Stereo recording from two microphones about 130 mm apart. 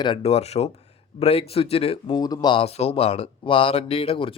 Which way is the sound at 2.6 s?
50° left (ahead or behind).